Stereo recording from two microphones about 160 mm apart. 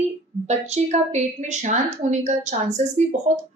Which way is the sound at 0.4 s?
45° right (ahead or behind).